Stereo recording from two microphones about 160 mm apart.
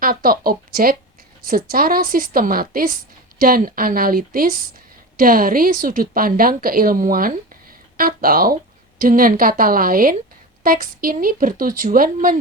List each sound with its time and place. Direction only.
0.0 s a woman's voice: 65° right (ahead or behind)